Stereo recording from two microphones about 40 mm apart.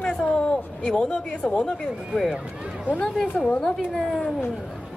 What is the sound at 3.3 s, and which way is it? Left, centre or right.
Speech, left.